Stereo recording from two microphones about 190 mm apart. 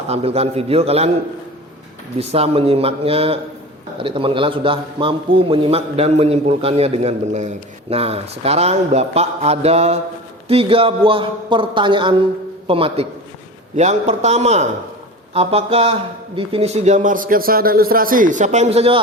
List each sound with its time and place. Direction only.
0.1 s a man's voice: 30° right (ahead or behind)
2.1 s a man's voice: 30° right (ahead or behind)